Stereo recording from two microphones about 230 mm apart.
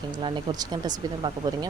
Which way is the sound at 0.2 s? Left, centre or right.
Right.